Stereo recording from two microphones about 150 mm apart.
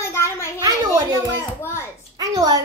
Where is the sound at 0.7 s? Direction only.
25° right (ahead or behind).